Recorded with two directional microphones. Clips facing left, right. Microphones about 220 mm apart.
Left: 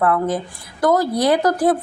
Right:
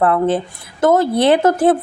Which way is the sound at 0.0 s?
30° right (ahead or behind).